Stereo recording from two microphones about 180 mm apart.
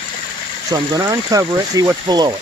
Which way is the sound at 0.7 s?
20° right (ahead or behind).